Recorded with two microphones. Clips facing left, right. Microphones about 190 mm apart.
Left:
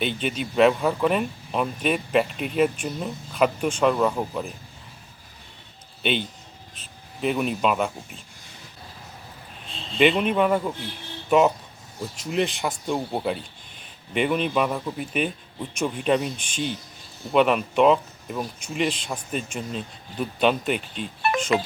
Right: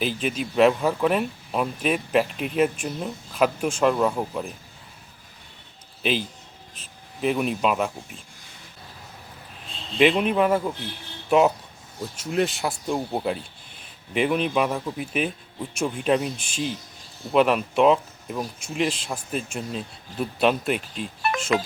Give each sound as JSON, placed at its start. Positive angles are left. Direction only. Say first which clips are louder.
{"t": 0.0, "sound": "speech", "louder": "even", "side_deg": 0}
{"t": 6.0, "sound": "a man's voice", "louder": "even", "side_deg": 0}
{"t": 10.0, "sound": "speech", "louder": "even", "side_deg": 0}